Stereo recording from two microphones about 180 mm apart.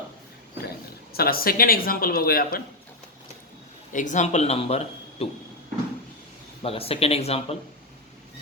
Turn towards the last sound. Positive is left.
turn(degrees=35)  # may be behind; listen again after turning